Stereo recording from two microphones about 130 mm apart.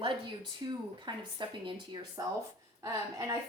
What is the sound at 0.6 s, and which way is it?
A woman's voice, 30° right (ahead or behind).